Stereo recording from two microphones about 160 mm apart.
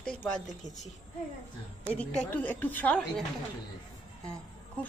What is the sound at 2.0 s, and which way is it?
A woman's voice, 10° left (ahead or behind).